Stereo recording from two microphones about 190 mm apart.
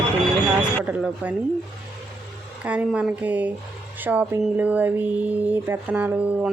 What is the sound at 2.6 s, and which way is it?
Speech, 5° right (ahead or behind).